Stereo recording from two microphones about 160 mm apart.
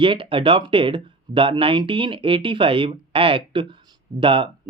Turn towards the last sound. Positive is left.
turn(degrees=-30)  # may be behind; listen again after turning